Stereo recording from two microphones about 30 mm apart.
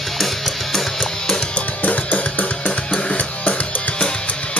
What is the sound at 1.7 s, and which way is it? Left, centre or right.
Music, left.